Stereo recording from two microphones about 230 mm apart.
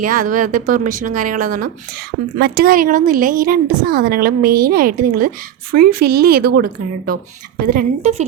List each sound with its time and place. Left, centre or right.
0.0 s speech: right